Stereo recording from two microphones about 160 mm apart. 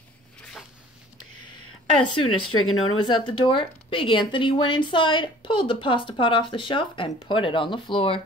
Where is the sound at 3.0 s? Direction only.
30° left (ahead or behind).